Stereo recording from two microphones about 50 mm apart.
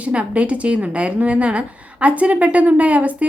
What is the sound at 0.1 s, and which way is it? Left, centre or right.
Speech, right.